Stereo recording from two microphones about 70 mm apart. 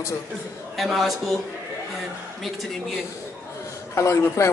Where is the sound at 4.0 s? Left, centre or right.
Left.